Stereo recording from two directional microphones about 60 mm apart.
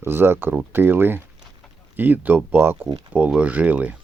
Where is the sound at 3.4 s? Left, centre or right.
Right.